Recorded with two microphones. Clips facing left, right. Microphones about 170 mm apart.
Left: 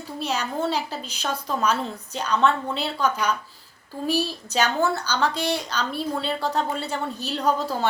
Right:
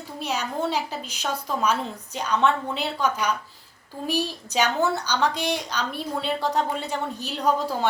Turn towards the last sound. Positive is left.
turn(degrees=-15)  # may be behind; listen again after turning